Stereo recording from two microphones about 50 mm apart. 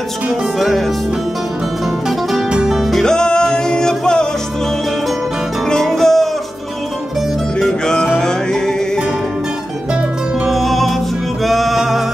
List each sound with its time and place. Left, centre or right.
0.6 s music: centre
2.7 s music: centre
3.0 s music: centre
5.7 s music: centre
7.8 s music: centre
10.4 s music: centre